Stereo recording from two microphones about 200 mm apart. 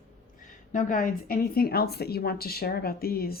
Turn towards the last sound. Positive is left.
turn(degrees=50)  # may be behind; listen again after turning